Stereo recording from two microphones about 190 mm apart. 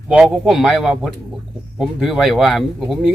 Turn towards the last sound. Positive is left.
turn(degrees=0)  # may be behind; listen again after turning